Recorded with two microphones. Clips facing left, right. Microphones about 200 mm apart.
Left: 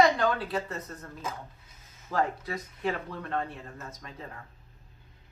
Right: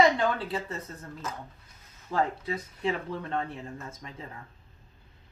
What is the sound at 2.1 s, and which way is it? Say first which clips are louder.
Speech: right 1 dB; 25° right (ahead or behind).